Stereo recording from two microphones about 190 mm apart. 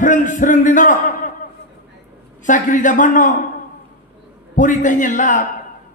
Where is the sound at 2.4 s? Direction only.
40° left (ahead or behind).